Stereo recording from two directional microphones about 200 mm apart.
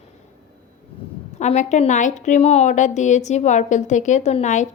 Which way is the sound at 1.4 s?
35° left (ahead or behind).